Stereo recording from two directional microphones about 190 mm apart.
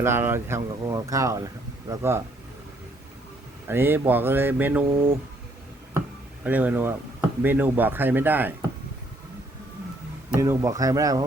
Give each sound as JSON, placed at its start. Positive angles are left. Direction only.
{"t": 0.0, "sound": "speech", "side_deg": -15}
{"t": 3.7, "sound": "speech", "side_deg": -10}
{"t": 6.4, "sound": "speech", "side_deg": -10}
{"t": 10.3, "sound": "speech", "side_deg": -15}